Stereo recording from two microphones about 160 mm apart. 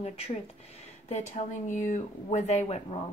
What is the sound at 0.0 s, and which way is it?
Speech, 40° left (ahead or behind).